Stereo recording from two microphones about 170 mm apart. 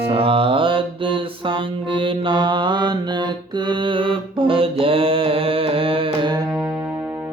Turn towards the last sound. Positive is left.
turn(degrees=-25)  # may be behind; listen again after turning